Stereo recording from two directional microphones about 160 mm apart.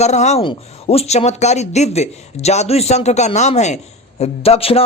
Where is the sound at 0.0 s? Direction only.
45° left (ahead or behind).